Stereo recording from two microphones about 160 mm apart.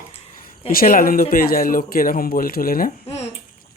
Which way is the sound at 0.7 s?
65° left (ahead or behind).